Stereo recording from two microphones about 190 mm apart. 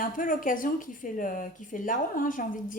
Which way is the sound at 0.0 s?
45° left (ahead or behind).